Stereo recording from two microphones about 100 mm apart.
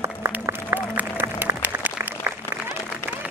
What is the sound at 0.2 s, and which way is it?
Applause, 25° right (ahead or behind).